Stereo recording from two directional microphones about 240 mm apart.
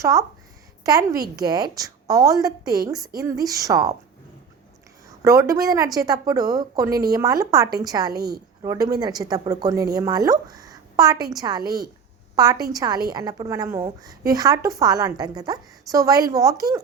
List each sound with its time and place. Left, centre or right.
0.0 s a woman's voice: centre
5.2 s a woman's voice: centre
8.1 s a woman's voice: right
8.6 s a woman's voice: centre
12.7 s a woman's voice: centre